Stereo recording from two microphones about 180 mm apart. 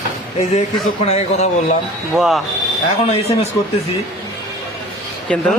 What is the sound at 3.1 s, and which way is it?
Speech, 35° left (ahead or behind).